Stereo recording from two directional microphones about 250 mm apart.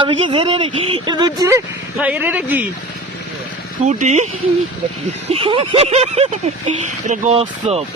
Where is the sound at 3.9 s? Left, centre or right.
Right.